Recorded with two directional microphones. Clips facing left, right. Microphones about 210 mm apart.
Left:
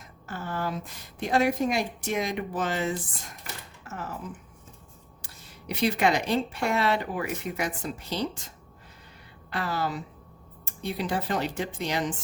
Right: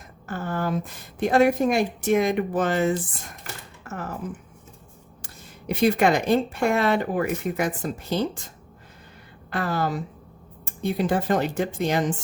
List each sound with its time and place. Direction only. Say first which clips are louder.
0.3 s a woman's voice: right 5 dB; 50° right (ahead or behind)
5.2 s speech: right 7 dB; 50° right (ahead or behind)
9.5 s speech: right 4 dB; 50° right (ahead or behind)